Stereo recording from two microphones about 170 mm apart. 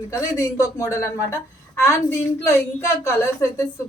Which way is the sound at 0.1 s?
20° left (ahead or behind).